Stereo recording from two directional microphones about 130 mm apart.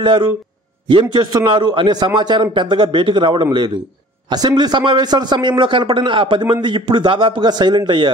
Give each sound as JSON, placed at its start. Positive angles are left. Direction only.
{"t": 0.0, "sound": "a man's voice", "side_deg": -35}